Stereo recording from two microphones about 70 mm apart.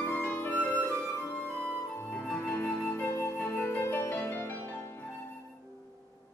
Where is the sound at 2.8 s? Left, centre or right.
Left.